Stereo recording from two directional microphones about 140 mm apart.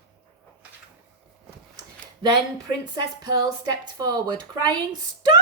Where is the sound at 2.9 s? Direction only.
30° right (ahead or behind).